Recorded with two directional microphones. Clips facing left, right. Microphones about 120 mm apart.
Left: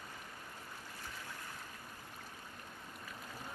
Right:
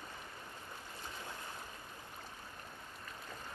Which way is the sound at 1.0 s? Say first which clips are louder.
Right 3 dB; 25° right (ahead or behind).